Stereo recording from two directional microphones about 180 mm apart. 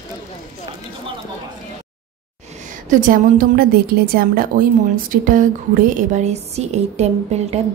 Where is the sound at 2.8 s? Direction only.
45° right (ahead or behind).